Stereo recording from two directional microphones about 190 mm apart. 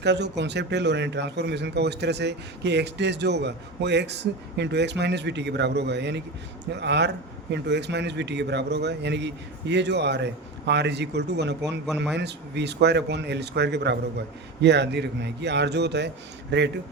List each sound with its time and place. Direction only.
0.0 s a man's voice: 65° right (ahead or behind)